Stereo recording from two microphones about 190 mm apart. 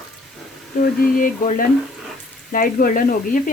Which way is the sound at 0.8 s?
50° left (ahead or behind).